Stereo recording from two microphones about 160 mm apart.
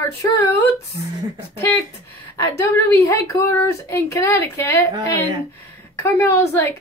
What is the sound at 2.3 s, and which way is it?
A woman's voice, 20° left (ahead or behind).